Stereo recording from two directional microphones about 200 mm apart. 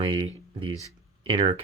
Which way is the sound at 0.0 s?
25° right (ahead or behind).